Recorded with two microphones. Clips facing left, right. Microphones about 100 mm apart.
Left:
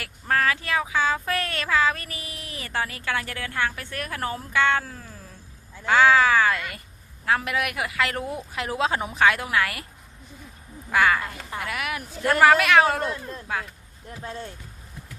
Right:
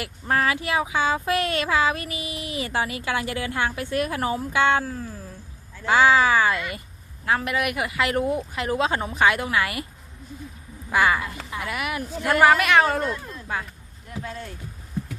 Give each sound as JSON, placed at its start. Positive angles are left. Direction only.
{"t": 0.0, "sound": "speech", "side_deg": -15}
{"t": 4.9, "sound": "speech", "side_deg": -5}
{"t": 10.8, "sound": "speech", "side_deg": -5}
{"t": 14.2, "sound": "speech", "side_deg": 25}